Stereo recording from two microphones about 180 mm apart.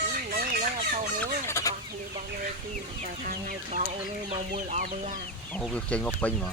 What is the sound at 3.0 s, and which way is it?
Speech, 50° right (ahead or behind).